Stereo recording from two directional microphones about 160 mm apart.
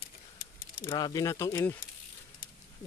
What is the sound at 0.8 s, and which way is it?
Speech, 25° left (ahead or behind).